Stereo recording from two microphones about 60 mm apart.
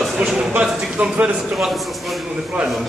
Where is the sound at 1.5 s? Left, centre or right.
Centre.